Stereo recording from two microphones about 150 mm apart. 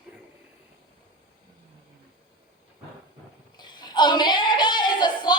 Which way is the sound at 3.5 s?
30° left (ahead or behind).